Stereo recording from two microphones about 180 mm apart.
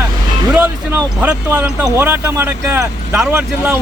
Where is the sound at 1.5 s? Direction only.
15° right (ahead or behind).